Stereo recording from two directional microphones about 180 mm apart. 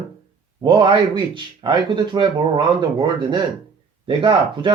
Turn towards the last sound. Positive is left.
turn(degrees=-25)  # may be behind; listen again after turning